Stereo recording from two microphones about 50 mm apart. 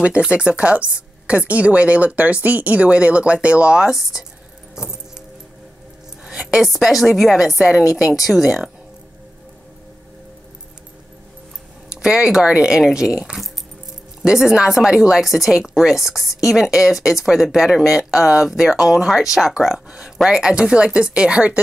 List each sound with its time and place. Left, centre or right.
0.0 s speech: right
3.9 s speech: centre
6.2 s a sound: centre
6.6 s a woman's voice: centre
12.0 s speech: centre